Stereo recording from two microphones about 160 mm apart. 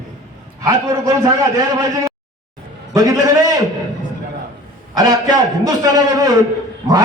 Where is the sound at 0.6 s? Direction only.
20° right (ahead or behind).